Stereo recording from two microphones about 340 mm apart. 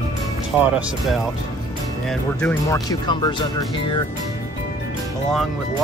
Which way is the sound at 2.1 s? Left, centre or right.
Centre.